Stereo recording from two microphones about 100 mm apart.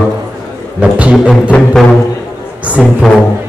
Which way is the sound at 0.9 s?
10° right (ahead or behind).